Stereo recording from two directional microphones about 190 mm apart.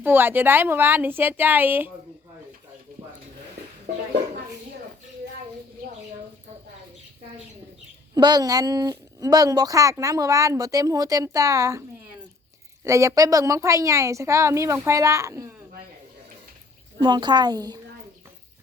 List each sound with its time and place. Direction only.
0.0 s speech: 10° right (ahead or behind)
8.1 s speech: 20° right (ahead or behind)
12.8 s speech: 15° right (ahead or behind)
17.0 s a woman's voice: 25° right (ahead or behind)